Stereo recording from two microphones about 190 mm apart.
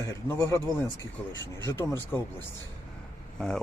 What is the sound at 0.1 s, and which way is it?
Speech, 15° left (ahead or behind).